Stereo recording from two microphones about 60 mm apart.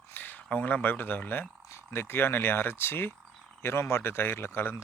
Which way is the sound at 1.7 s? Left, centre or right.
Left.